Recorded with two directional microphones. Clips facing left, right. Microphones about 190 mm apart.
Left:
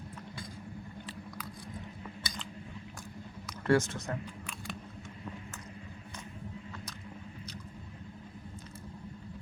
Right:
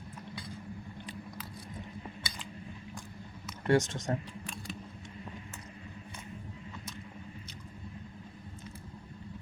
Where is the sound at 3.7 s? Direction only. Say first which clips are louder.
Even; 25° right (ahead or behind).